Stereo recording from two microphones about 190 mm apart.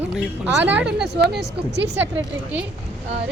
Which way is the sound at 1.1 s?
60° right (ahead or behind).